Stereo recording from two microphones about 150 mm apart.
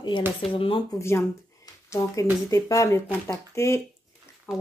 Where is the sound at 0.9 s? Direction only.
20° left (ahead or behind).